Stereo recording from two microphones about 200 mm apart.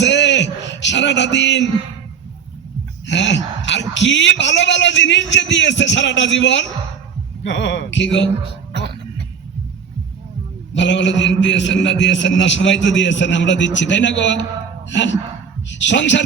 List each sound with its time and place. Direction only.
0.0 s a sound: 60° left (ahead or behind)
3.1 s a man's voice: 65° left (ahead or behind)
10.8 s a man's voice: 65° left (ahead or behind)